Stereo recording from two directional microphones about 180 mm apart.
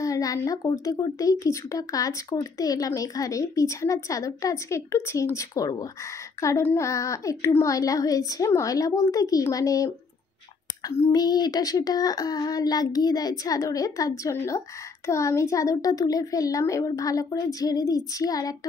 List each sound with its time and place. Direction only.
0.0 s speech: 20° left (ahead or behind)
10.9 s speech: 20° left (ahead or behind)